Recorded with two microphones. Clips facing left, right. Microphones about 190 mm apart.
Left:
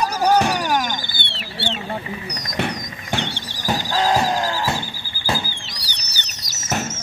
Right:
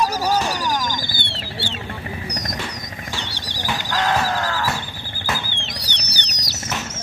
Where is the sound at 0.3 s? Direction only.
60° left (ahead or behind).